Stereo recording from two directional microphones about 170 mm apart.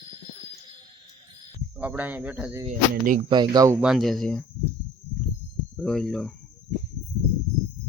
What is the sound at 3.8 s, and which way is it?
Speech, centre (ahead or behind).